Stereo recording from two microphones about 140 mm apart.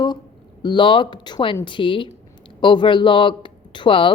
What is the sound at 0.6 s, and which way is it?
A woman's voice, 35° left (ahead or behind).